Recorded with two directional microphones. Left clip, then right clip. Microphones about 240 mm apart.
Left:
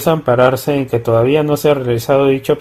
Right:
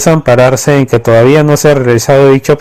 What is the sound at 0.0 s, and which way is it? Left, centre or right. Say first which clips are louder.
Speech: right 5 dB; right.